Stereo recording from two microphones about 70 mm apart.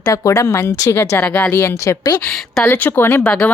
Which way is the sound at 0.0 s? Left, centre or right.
Left.